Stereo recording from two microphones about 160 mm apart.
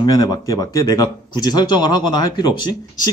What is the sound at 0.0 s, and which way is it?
Speech, 20° left (ahead or behind).